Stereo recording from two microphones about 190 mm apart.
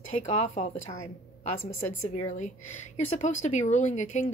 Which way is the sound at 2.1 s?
40° left (ahead or behind).